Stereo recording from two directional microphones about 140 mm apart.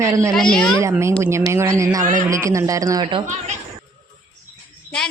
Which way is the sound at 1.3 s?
20° right (ahead or behind).